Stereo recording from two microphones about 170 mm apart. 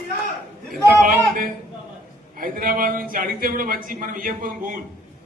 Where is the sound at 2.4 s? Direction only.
55° right (ahead or behind).